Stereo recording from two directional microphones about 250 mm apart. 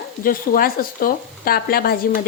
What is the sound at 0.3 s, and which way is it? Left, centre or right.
Speech, left.